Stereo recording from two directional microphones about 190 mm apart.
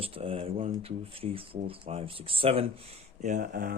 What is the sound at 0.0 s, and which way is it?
Speech, 30° right (ahead or behind).